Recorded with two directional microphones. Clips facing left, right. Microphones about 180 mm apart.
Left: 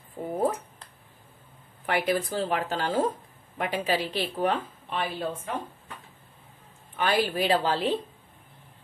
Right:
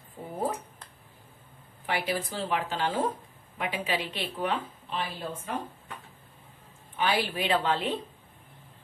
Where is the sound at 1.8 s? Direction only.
50° left (ahead or behind).